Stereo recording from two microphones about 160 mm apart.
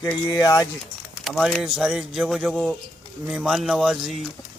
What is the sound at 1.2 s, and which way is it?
Speech, centre (ahead or behind).